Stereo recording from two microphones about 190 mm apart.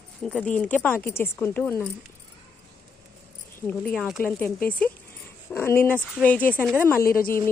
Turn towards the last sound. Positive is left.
turn(degrees=50)  # may be behind; listen again after turning